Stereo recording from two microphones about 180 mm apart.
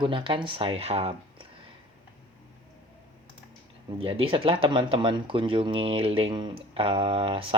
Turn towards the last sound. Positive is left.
turn(degrees=-30)  # may be behind; listen again after turning